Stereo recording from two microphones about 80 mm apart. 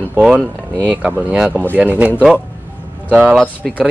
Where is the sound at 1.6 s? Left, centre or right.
Right; by 3.4 s centre.